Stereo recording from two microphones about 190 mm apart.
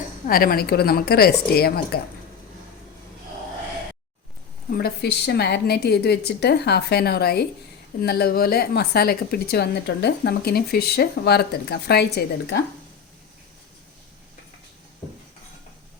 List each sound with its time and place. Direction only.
0.3 s a woman's voice: 50° left (ahead or behind)
4.7 s a woman's voice: 55° left (ahead or behind)